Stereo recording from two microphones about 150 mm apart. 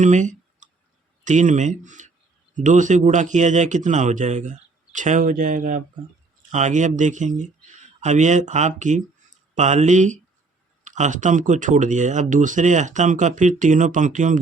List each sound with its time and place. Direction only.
0.0 s clicking: 55° right (ahead or behind)
1.2 s speech: 55° right (ahead or behind)
6.5 s speech: 50° right (ahead or behind)